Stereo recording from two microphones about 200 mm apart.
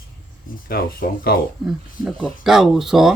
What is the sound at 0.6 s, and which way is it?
Speech, 45° left (ahead or behind).